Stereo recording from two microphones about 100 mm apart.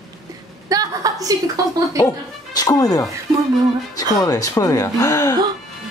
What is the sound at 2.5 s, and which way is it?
Speech, 40° left (ahead or behind).